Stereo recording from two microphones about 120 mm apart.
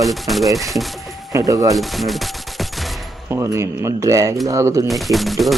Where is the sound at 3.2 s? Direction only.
25° right (ahead or behind).